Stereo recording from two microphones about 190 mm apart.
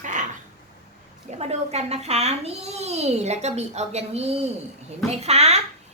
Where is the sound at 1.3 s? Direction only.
35° right (ahead or behind).